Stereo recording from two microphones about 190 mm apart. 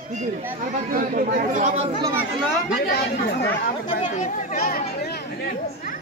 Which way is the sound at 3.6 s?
45° left (ahead or behind).